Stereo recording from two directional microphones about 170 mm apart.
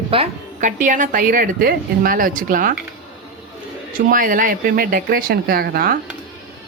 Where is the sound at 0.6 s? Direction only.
50° right (ahead or behind).